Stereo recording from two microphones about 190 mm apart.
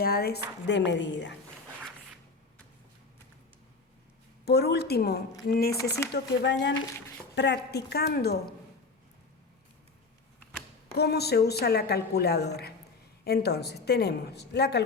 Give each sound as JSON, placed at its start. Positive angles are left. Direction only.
{"t": 0.0, "sound": "a woman's voice", "side_deg": 55}
{"t": 0.9, "sound": "speech", "side_deg": 70}
{"t": 4.4, "sound": "a woman's voice", "side_deg": 60}
{"t": 6.1, "sound": "a woman's voice", "side_deg": 65}
{"t": 10.9, "sound": "a woman's voice", "side_deg": 60}